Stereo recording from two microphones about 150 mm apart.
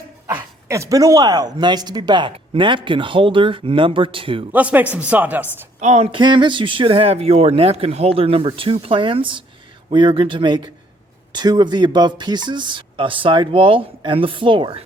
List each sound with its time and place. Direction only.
0.7 s speech: 20° right (ahead or behind); by 4.4 s 35° right (ahead or behind)
4.5 s speech: 10° right (ahead or behind)
5.8 s speech: 50° right (ahead or behind)
6.1 s speech: 30° right (ahead or behind)